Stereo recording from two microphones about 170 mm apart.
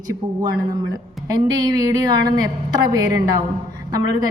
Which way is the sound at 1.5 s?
20° right (ahead or behind).